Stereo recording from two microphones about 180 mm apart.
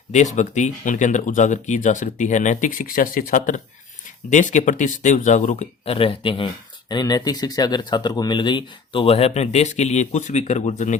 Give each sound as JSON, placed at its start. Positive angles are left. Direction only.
{"t": 0.1, "sound": "speech", "side_deg": 40}